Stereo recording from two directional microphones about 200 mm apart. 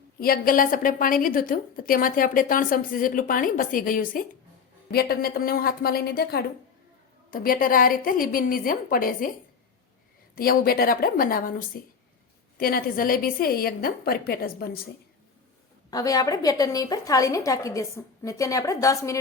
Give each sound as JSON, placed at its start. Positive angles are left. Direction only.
{"t": 0.2, "sound": "a woman's voice", "side_deg": 45}
{"t": 10.3, "sound": "a woman's voice", "side_deg": 45}
{"t": 15.9, "sound": "a woman's voice", "side_deg": 20}